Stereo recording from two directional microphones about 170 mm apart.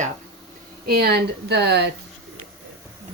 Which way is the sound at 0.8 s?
70° right (ahead or behind).